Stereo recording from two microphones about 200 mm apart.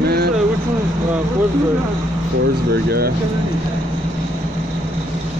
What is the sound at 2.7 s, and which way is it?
Speech, 50° right (ahead or behind).